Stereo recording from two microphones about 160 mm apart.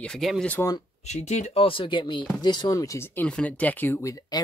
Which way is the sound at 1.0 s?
45° left (ahead or behind).